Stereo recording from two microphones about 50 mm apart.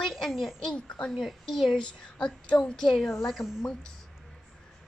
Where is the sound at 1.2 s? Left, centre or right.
Centre.